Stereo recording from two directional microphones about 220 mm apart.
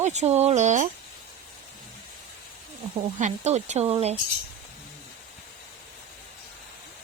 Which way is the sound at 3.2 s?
30° right (ahead or behind).